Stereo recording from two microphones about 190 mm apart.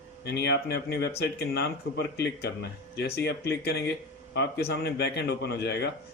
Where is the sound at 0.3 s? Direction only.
60° left (ahead or behind).